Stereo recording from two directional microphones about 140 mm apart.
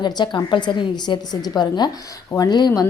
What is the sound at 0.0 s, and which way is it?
A woman's voice, 30° left (ahead or behind).